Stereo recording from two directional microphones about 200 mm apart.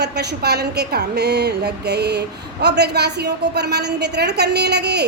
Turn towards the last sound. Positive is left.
turn(degrees=-55)  # may be behind; listen again after turning